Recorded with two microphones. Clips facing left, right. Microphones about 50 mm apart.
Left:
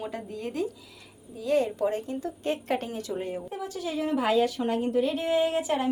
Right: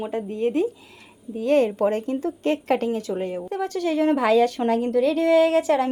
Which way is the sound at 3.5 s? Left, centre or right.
Right.